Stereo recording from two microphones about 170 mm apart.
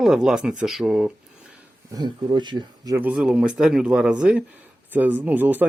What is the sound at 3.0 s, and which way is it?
Speech, 5° right (ahead or behind).